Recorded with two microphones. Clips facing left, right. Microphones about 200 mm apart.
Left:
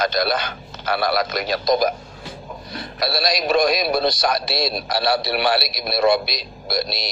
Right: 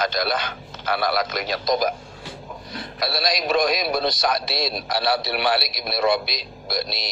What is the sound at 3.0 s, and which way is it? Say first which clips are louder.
Speech: left 3 dB; 40° left (ahead or behind).